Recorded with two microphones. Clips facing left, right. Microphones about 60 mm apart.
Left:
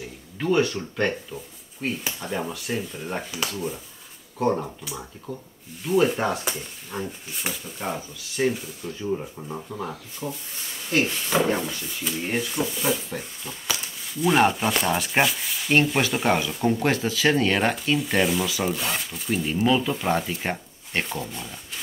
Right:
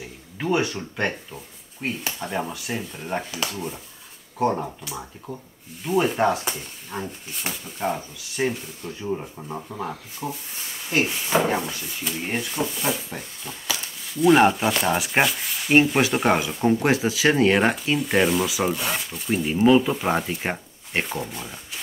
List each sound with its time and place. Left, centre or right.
0.0 s speech: centre
19.5 s speech: centre
19.9 s speech: centre